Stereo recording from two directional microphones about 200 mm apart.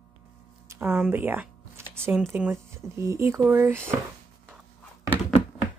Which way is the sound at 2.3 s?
10° right (ahead or behind).